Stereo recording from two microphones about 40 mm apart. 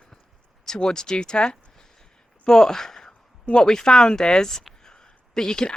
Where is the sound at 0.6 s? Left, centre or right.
Centre.